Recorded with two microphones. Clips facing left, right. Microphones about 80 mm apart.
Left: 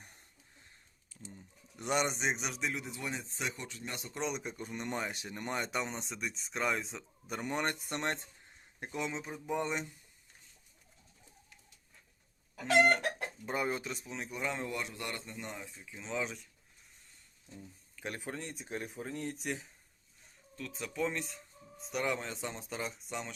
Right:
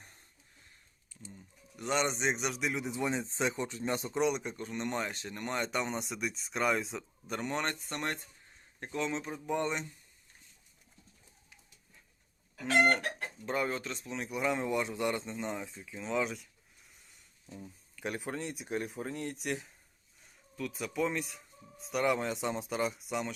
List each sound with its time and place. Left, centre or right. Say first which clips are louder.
1.7 s speech: right 1 dB; left
2.0 s speech: right 2 dB; centre
2.7 s speech: right 6 dB; right
4.2 s speech: right 5 dB; centre
4.5 s speech: right 3 dB; centre
7.4 s speech: even; centre
8.8 s speech: right 3 dB; centre
13.4 s speech: right 2 dB; centre
13.9 s speech: right 4 dB; centre
14.6 s speech: right 7 dB; right
15.9 s speech: right 4 dB; centre
17.4 s a sound: right 4 dB; right
17.9 s speech: right 4 dB; centre